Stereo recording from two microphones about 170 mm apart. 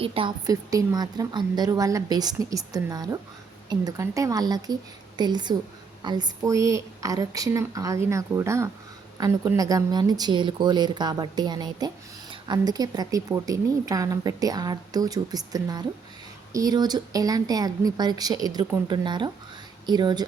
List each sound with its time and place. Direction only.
0.0 s a woman's voice: 30° right (ahead or behind)